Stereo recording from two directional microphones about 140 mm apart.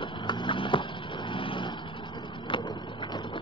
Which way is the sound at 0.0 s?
35° left (ahead or behind).